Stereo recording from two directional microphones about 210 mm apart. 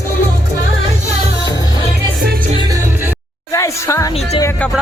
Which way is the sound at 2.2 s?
45° right (ahead or behind).